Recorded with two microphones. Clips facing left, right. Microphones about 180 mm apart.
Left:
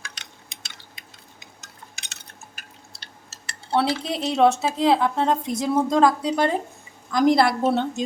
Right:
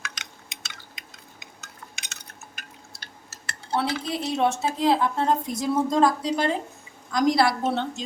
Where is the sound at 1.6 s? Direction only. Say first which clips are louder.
Right 2 dB; 35° left (ahead or behind).